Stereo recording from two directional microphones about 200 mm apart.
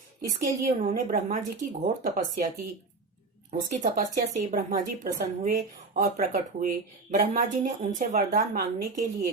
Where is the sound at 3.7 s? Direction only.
40° right (ahead or behind).